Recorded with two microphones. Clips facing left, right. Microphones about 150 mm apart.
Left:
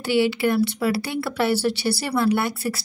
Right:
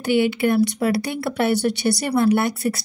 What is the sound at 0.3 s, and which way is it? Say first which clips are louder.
Speech: right 2 dB; 20° right (ahead or behind).